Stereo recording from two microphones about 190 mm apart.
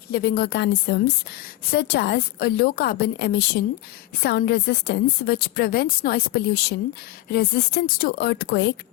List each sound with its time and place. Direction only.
0.1 s a woman's voice: 55° left (ahead or behind)